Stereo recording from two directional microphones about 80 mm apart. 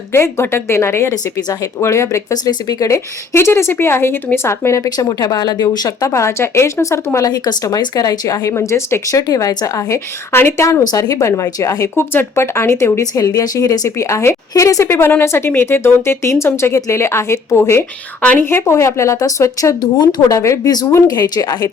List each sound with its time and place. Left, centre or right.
0.1 s speech: left
1.1 s a woman's voice: left
1.8 s speech: left
2.3 s speech: left
4.9 s speech: left
6.1 s speech: left
7.3 s a woman's voice: left
10.3 s speech: left
11.9 s speech: left
13.0 s a woman's voice: left
18.2 s a woman's voice: centre
18.4 s speech: left
20.3 s speech: left
21.1 s speech: left